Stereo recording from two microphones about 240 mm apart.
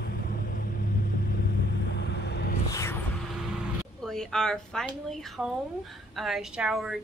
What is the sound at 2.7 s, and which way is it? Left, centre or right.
Music, centre.